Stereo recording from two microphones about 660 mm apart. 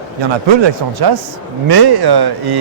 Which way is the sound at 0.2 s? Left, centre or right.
Right.